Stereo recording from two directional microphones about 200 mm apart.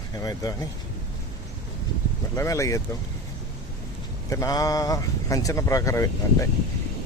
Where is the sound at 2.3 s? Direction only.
15° left (ahead or behind).